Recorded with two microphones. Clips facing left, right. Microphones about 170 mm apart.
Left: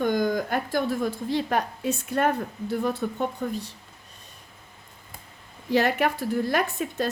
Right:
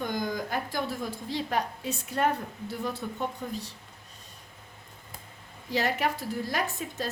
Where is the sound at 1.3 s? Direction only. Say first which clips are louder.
Left 2 dB; 60° left (ahead or behind).